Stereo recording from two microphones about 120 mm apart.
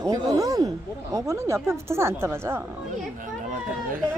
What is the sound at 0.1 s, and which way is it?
Speech, 30° right (ahead or behind).